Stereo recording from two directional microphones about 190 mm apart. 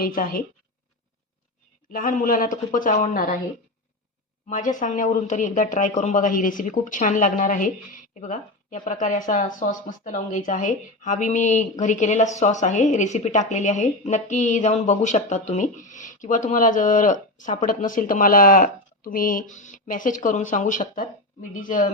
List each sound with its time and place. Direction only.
0.0 s speech: 50° left (ahead or behind)
1.9 s speech: 45° left (ahead or behind)
4.4 s speech: 40° left (ahead or behind)